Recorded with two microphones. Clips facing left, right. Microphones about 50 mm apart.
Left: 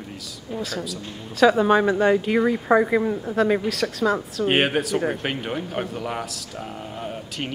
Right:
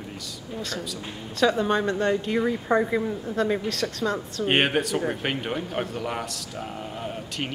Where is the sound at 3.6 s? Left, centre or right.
Centre.